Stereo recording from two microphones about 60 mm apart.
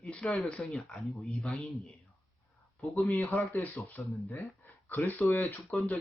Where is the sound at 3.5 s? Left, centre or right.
Left.